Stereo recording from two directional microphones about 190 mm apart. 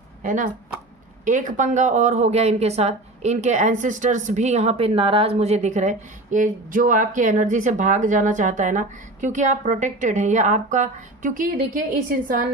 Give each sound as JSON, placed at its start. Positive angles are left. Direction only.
{"t": 0.2, "sound": "speech", "side_deg": -40}